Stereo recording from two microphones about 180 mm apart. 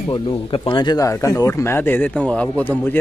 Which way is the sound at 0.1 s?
25° left (ahead or behind).